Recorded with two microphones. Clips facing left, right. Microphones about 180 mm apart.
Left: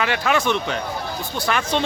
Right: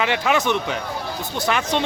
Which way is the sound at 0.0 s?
20° right (ahead or behind).